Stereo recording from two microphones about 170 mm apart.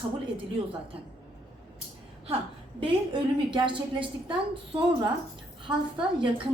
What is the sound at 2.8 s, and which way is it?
A woman's voice, 30° right (ahead or behind).